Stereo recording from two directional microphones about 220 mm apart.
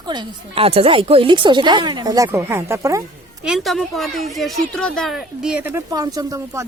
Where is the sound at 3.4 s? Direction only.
Centre (ahead or behind).